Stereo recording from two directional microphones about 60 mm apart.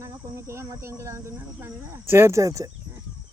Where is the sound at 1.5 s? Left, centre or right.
Right.